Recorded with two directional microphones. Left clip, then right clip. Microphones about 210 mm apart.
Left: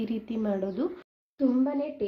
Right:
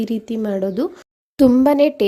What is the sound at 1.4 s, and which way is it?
Speech, 55° right (ahead or behind).